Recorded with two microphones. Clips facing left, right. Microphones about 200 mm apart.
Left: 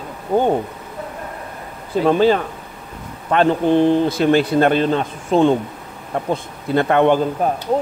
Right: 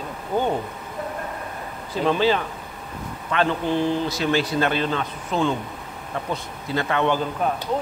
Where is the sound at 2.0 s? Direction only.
50° left (ahead or behind).